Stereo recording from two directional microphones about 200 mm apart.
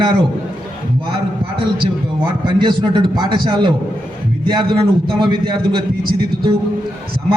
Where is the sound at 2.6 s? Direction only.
20° right (ahead or behind).